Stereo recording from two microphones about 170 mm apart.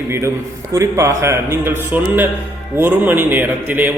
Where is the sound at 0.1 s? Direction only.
15° right (ahead or behind).